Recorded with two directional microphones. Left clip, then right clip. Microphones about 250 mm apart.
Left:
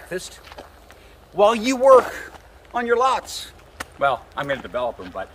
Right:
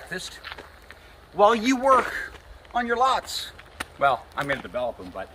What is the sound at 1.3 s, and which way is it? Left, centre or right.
Speech, left.